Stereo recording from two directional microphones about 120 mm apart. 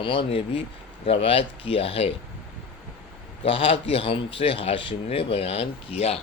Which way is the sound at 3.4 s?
50° left (ahead or behind).